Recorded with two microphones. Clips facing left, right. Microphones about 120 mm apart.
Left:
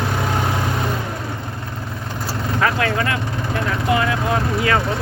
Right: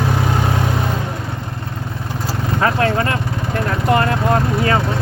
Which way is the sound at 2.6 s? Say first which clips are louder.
Right 3 dB; 35° right (ahead or behind).